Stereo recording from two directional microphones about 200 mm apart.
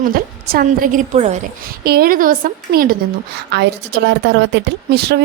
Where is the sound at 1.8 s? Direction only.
50° right (ahead or behind).